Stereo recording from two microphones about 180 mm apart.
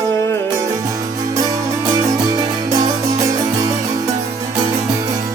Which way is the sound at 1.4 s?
20° right (ahead or behind).